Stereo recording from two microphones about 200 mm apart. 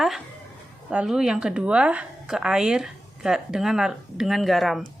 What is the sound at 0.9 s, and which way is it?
A woman's voice, 5° right (ahead or behind).